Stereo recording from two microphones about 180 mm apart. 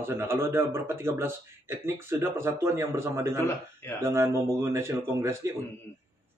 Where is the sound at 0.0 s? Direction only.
15° right (ahead or behind).